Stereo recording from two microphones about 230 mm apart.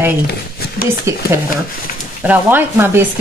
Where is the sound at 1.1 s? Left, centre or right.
Centre.